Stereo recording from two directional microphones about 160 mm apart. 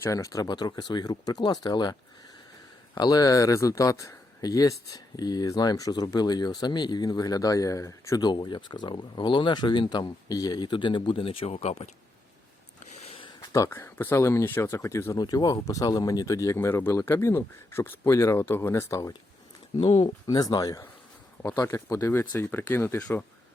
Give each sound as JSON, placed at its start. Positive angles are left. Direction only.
{"t": 0.0, "sound": "speech", "side_deg": 20}
{"t": 13.1, "sound": "a sound", "side_deg": 35}
{"t": 13.5, "sound": "speech", "side_deg": 15}
{"t": 19.8, "sound": "speech", "side_deg": 35}